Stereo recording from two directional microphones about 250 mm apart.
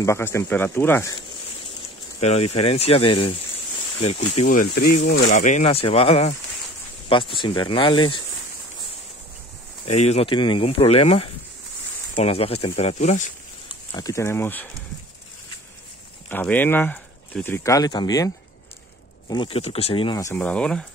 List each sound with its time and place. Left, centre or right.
0.0 s speech: centre
2.1 s speech: left
9.8 s speech: left
13.9 s speech: centre
16.3 s speech: centre